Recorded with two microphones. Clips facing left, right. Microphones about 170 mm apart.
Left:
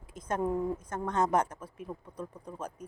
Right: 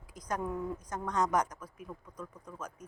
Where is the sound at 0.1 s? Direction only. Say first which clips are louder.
Left 5 dB; 25° left (ahead or behind).